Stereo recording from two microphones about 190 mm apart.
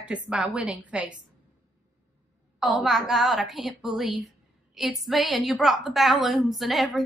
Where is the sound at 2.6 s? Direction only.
Centre (ahead or behind).